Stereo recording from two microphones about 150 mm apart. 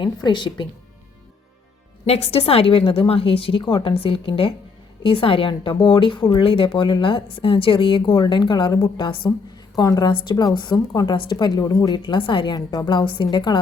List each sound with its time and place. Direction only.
0.0 s a woman's voice: 30° left (ahead or behind)
2.0 s a woman's voice: 40° left (ahead or behind)